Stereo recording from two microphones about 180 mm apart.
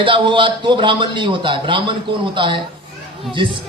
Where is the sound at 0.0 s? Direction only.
30° right (ahead or behind).